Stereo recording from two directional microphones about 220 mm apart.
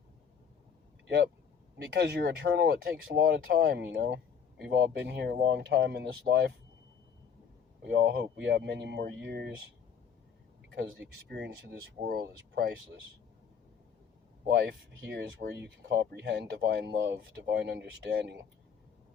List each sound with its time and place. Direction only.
1.0 s speech: 55° right (ahead or behind)
7.9 s speech: 50° right (ahead or behind)
10.7 s speech: 55° right (ahead or behind)
14.5 s speech: 50° right (ahead or behind)